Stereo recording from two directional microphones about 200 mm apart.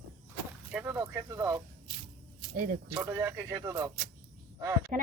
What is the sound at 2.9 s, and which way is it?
Speech, 15° right (ahead or behind).